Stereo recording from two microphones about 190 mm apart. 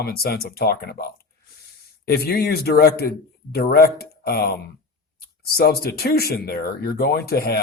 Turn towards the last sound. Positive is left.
turn(degrees=55)  # may be behind; listen again after turning